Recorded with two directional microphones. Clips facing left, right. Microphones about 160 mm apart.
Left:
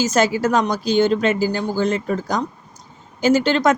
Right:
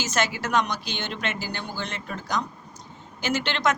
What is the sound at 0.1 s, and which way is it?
A woman's voice, 45° left (ahead or behind).